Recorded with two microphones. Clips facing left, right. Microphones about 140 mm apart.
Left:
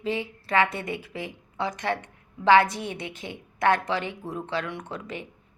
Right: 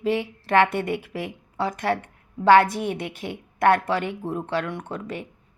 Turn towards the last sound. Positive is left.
turn(degrees=-50)  # may be behind; listen again after turning